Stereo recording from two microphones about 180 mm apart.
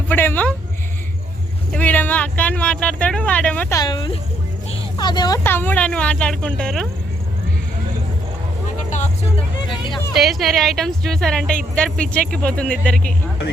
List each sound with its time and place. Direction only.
0.1 s speech: 10° left (ahead or behind)
1.7 s speech: 10° left (ahead or behind)
3.8 s speech: 25° left (ahead or behind); by 6.8 s 5° left (ahead or behind)
8.6 s vehicle: 40° left (ahead or behind)
10.2 s a woman's voice: centre (ahead or behind)